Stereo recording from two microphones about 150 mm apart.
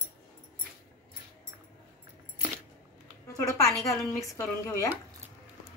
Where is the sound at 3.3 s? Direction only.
20° left (ahead or behind).